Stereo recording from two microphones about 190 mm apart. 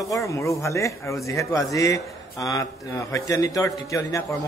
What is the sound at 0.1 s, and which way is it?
A man's voice, 15° left (ahead or behind).